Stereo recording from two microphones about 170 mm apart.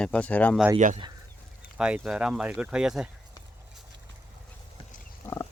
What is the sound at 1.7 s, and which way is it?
Speech, 5° right (ahead or behind).